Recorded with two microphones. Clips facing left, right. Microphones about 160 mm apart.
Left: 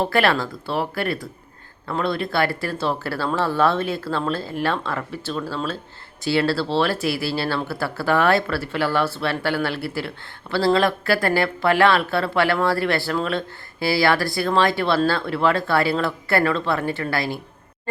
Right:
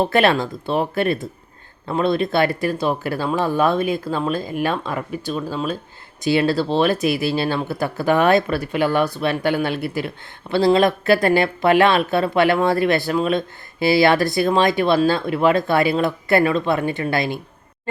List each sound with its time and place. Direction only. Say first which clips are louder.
0.0 s speech: right 3 dB; 20° right (ahead or behind)